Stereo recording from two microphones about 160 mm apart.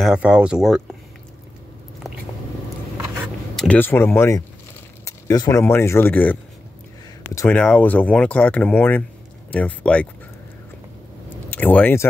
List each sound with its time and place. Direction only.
0.0 s speech: 5° right (ahead or behind)
3.5 s speech: 10° left (ahead or behind)
7.3 s speech: 10° left (ahead or behind)
11.5 s speech: 10° left (ahead or behind)